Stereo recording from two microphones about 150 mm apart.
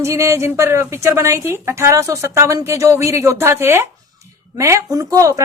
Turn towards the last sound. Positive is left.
turn(degrees=-20)  # may be behind; listen again after turning